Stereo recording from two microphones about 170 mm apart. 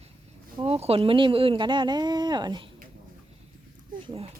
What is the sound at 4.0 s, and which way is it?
Speech, 35° right (ahead or behind).